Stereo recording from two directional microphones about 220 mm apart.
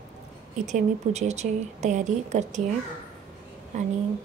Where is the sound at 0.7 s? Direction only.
30° right (ahead or behind).